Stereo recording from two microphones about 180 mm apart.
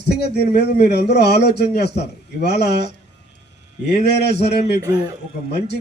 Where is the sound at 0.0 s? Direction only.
65° left (ahead or behind).